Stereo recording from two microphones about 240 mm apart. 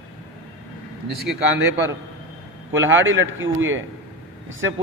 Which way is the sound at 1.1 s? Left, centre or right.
Centre.